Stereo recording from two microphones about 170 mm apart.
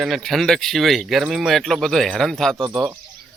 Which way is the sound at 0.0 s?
Centre (ahead or behind).